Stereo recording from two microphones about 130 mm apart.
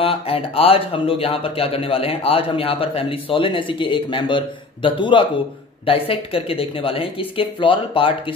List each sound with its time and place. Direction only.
0.0 s speech: 45° left (ahead or behind)